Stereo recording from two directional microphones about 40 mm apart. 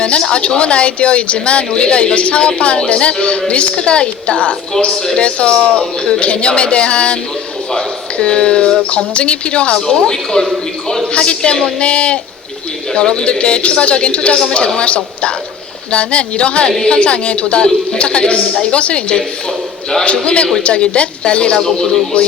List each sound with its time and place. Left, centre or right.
0.2 s a woman's voice: centre
9.8 s a woman's voice: centre
20.2 s a woman's voice: left